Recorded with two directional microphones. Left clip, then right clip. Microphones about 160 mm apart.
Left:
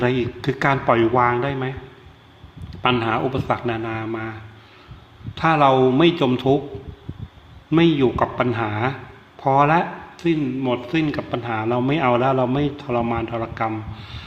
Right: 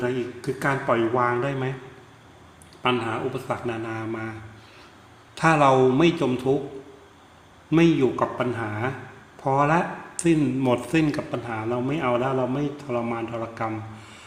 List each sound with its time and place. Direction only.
0.0 s speech: 25° left (ahead or behind)
1.2 s speech: 10° left (ahead or behind)
2.8 s speech: 20° left (ahead or behind)
7.7 s speech: centre (ahead or behind)
10.2 s speech: 10° right (ahead or behind); by 13.7 s 10° left (ahead or behind)